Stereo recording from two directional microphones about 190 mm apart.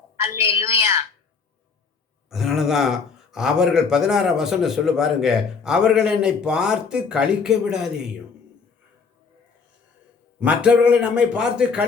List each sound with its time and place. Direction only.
0.2 s a woman's voice: 15° right (ahead or behind)
2.3 s speech: centre (ahead or behind)
10.4 s speech: 5° right (ahead or behind)